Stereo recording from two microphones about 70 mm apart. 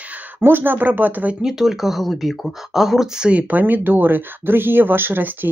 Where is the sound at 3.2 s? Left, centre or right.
Right.